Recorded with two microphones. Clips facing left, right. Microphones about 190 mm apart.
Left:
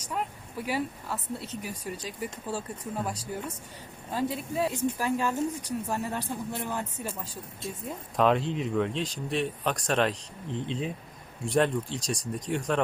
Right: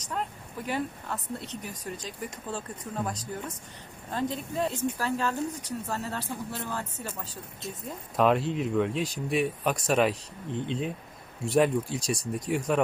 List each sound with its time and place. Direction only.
0.0 s speech: 10° left (ahead or behind)
8.1 s speech: centre (ahead or behind)